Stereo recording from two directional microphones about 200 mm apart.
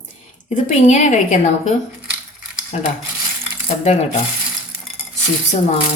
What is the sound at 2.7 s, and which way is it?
A woman's voice, 35° left (ahead or behind).